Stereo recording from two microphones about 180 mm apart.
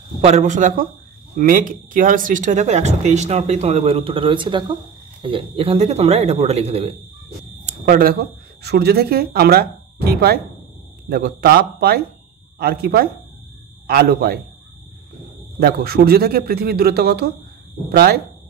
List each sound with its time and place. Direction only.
0.2 s speech: 40° right (ahead or behind)
7.6 s speech: 50° right (ahead or behind)
15.6 s speech: 60° right (ahead or behind)